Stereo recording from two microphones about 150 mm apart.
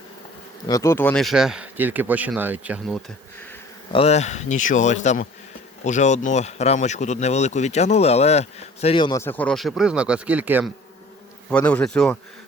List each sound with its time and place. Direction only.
0.7 s bee: 20° left (ahead or behind)
1.2 s speech: centre (ahead or behind)
3.9 s speech: 45° left (ahead or behind)
9.0 s speech: 30° left (ahead or behind)
9.2 s speech: 10° left (ahead or behind); by 10.7 s 10° right (ahead or behind)
11.4 s bee: 10° left (ahead or behind)